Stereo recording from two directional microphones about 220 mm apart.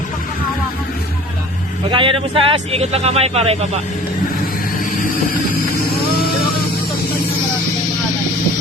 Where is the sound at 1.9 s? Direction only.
25° right (ahead or behind).